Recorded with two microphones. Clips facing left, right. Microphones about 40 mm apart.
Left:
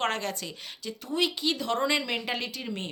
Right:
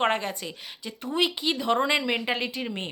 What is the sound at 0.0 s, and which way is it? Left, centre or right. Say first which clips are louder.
A woman's voice: right 4 dB; centre.